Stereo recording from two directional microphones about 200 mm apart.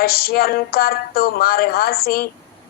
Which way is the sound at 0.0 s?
50° left (ahead or behind).